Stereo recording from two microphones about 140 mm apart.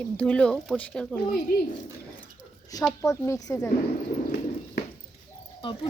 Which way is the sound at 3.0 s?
20° left (ahead or behind).